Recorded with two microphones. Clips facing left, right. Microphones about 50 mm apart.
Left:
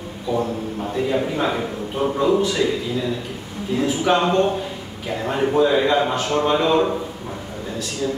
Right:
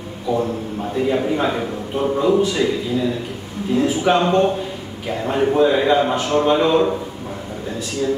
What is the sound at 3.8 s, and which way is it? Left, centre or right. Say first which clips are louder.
Speech: right 2 dB; centre.